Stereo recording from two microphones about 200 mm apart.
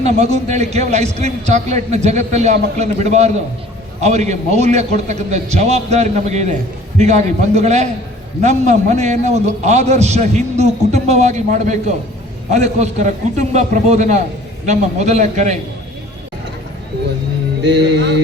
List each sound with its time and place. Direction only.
0.0 s a man's voice: 35° right (ahead or behind)
17.6 s music: 60° right (ahead or behind)